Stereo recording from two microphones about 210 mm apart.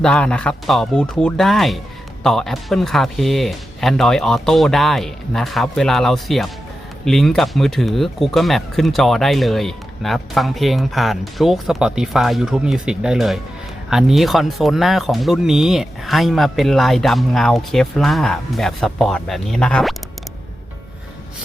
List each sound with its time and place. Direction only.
0.0 s speech: 5° left (ahead or behind)